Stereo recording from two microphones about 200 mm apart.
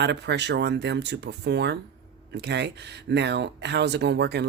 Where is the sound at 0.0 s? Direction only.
60° right (ahead or behind).